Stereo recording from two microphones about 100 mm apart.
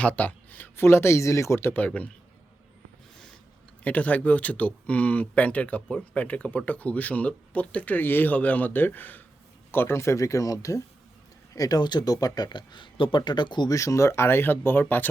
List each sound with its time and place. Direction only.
0.0 s speech: 15° left (ahead or behind)
3.8 s speech: 15° left (ahead or behind); by 13.7 s 50° left (ahead or behind)
13.7 s speech: 35° left (ahead or behind)